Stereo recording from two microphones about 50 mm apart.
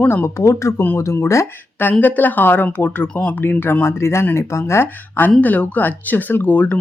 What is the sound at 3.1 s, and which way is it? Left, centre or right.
Speech, left.